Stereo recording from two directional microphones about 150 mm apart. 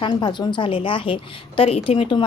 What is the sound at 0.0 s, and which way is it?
A woman's voice, 30° left (ahead or behind).